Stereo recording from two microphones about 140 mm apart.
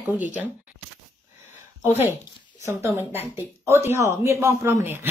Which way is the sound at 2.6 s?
20° right (ahead or behind).